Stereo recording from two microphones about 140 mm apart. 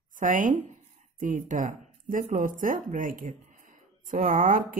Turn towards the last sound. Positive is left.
turn(degrees=-85)